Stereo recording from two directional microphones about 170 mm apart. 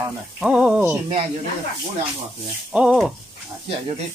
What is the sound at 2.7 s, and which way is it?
Speech, 5° right (ahead or behind).